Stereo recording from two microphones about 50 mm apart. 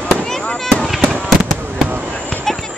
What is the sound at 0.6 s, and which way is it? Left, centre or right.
Fireworks, centre.